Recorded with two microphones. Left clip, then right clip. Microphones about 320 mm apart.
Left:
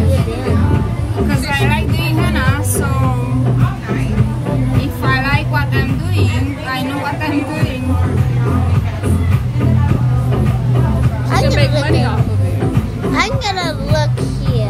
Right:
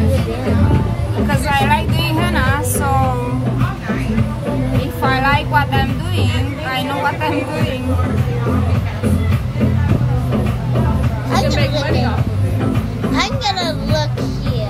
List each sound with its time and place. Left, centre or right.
1.5 s music: centre
5.0 s music: centre
11.3 s music: left
13.1 s music: centre